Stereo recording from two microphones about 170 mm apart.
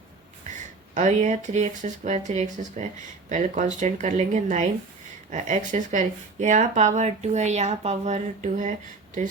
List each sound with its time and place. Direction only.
0.9 s speech: 45° right (ahead or behind)